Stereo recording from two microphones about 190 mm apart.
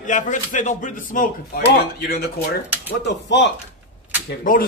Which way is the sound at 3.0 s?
65° left (ahead or behind).